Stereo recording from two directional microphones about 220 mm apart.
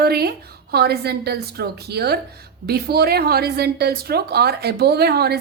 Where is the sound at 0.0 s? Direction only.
45° right (ahead or behind).